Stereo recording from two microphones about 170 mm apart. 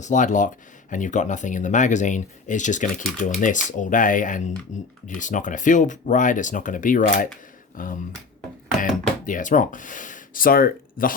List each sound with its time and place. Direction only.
0.0 s speech: 45° left (ahead or behind)